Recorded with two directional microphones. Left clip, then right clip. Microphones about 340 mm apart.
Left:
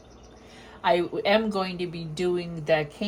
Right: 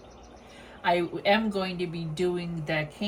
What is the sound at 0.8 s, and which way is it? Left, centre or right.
Speech, centre.